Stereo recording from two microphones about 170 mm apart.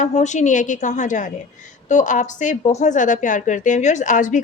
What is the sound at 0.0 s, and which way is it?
Speech, 45° left (ahead or behind).